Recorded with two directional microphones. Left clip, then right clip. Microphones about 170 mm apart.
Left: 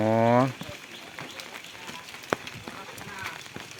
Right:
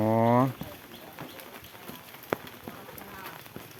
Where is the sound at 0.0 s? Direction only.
5° right (ahead or behind).